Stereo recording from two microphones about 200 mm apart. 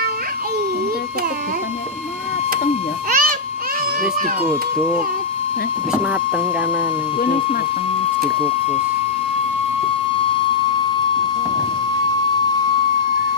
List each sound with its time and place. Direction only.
3.1 s music: 45° right (ahead or behind)